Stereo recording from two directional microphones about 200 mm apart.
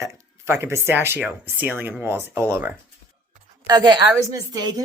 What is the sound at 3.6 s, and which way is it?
A woman's voice, 20° right (ahead or behind).